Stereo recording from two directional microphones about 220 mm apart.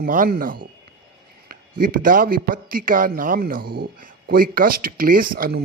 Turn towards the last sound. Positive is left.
turn(degrees=-45)  # may be behind; listen again after turning